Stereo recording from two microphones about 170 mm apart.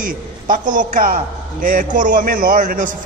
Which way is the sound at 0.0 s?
50° right (ahead or behind).